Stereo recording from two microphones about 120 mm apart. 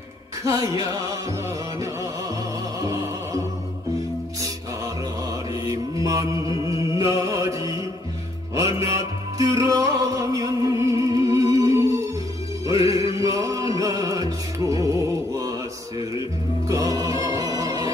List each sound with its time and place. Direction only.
0.5 s music: 25° right (ahead or behind)
2.8 s music: 25° right (ahead or behind)
5.7 s music: 25° right (ahead or behind)
16.6 s music: 30° right (ahead or behind)